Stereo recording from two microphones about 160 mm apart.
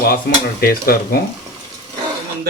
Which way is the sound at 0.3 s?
75° left (ahead or behind).